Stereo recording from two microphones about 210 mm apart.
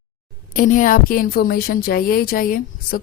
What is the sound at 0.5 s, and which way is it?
A woman's voice, 40° left (ahead or behind).